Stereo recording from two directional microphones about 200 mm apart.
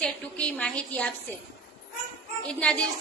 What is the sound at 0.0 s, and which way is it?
A woman's voice, 5° left (ahead or behind).